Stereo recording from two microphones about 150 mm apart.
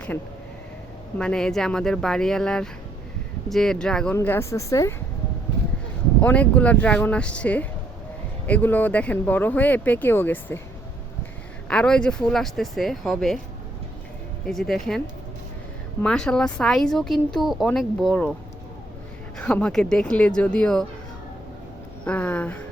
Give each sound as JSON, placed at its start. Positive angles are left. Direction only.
{"t": 1.2, "sound": "speech", "side_deg": 5}
{"t": 6.2, "sound": "speech", "side_deg": 10}
{"t": 11.7, "sound": "speech", "side_deg": 5}
{"t": 14.4, "sound": "speech", "side_deg": 5}
{"t": 19.4, "sound": "speech", "side_deg": 5}
{"t": 22.0, "sound": "speech", "side_deg": 10}